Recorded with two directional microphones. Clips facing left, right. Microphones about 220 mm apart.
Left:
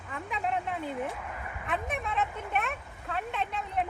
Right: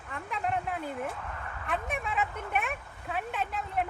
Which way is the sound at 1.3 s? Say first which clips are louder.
Left 1 dB; 15° left (ahead or behind).